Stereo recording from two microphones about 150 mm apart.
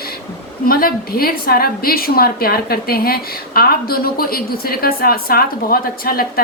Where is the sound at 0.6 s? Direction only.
80° left.